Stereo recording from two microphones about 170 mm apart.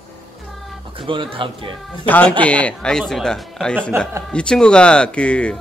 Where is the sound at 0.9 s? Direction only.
30° right (ahead or behind).